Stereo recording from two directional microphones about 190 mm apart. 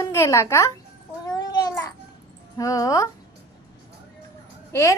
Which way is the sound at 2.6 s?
15° left (ahead or behind).